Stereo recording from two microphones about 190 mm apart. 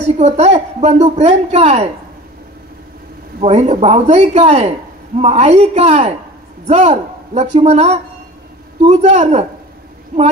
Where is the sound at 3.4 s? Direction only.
35° right (ahead or behind).